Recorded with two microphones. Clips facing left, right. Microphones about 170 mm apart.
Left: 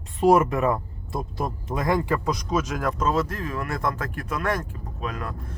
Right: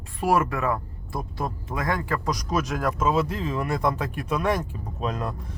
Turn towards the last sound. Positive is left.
turn(degrees=-20)  # may be behind; listen again after turning